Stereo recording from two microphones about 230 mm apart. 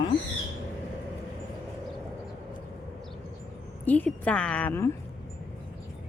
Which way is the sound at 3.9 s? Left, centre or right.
Centre.